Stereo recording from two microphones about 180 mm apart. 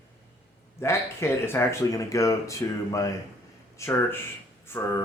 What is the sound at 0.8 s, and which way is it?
Speech, 15° left (ahead or behind).